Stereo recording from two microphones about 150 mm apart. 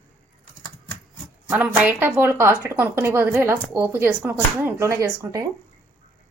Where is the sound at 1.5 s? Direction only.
10° right (ahead or behind).